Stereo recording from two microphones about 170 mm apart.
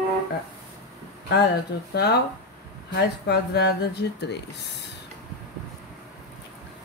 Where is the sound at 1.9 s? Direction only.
75° left (ahead or behind).